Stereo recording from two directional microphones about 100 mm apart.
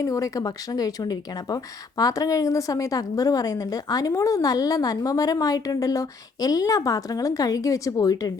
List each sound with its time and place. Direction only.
0.0 s speech: 35° left (ahead or behind)